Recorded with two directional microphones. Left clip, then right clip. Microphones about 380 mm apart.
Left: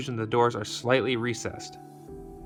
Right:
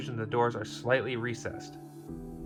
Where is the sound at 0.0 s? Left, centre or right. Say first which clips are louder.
Left 5 dB; left.